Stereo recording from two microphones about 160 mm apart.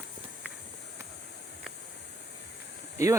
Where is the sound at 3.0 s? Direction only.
20° right (ahead or behind).